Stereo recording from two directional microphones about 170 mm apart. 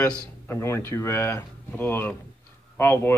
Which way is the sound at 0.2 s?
15° left (ahead or behind).